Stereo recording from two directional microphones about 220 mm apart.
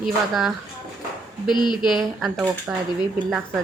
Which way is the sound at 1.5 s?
20° left (ahead or behind).